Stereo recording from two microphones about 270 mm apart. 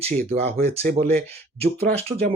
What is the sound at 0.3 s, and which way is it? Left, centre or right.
Speech, right.